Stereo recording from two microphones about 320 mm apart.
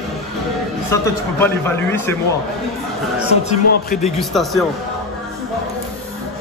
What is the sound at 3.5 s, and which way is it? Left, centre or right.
Speech, left.